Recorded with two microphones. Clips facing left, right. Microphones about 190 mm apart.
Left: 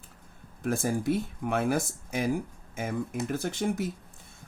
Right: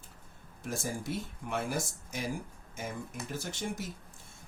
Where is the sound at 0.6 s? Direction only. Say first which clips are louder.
Left 9 dB; 55° left (ahead or behind).